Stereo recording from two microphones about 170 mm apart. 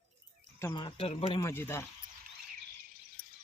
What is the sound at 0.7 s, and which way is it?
Speech, 30° left (ahead or behind).